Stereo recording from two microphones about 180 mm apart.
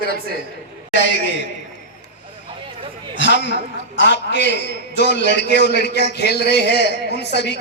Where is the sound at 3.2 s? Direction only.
80° left.